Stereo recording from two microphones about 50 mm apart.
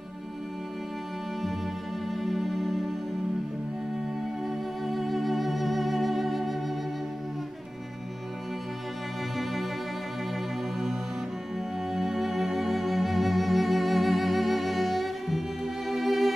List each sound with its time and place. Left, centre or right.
2.0 s music: centre
4.5 s music: centre
9.4 s music: centre